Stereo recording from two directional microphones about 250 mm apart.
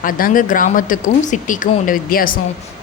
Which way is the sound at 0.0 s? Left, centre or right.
Left.